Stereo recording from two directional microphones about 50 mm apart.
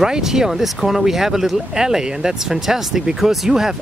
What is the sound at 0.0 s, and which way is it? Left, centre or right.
Speech, centre.